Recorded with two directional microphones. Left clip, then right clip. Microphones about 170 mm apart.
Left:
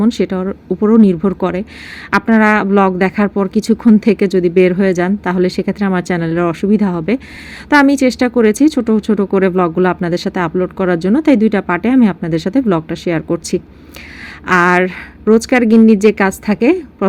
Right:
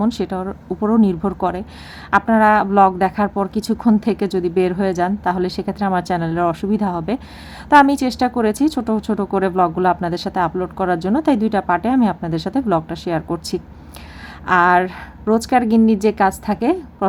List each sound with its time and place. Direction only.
0.0 s speech: 20° left (ahead or behind)
0.4 s a woman's voice: 35° left (ahead or behind)
1.4 s speech: 20° left (ahead or behind)